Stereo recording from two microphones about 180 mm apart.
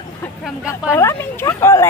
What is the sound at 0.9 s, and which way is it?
Speech, 15° left (ahead or behind).